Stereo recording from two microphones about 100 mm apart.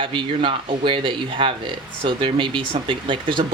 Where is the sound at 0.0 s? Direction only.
60° right (ahead or behind).